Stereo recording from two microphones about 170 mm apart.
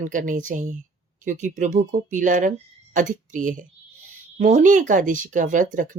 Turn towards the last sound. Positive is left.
turn(degrees=-50)  # may be behind; listen again after turning